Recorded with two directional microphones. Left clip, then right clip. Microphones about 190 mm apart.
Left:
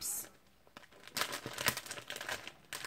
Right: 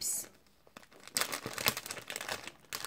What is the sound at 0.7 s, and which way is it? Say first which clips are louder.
Crumpling: right 2 dB; 30° right (ahead or behind).